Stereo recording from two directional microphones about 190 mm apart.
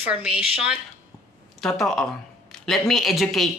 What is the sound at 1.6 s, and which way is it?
A woman's voice, 5° left (ahead or behind).